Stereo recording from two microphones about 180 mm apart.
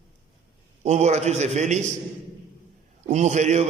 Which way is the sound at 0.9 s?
35° right (ahead or behind).